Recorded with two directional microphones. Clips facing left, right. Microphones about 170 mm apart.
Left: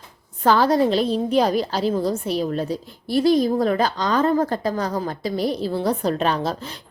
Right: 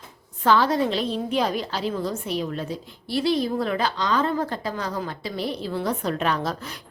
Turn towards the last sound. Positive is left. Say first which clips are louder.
# left 3 dB
turn(degrees=30)  # may be behind; listen again after turning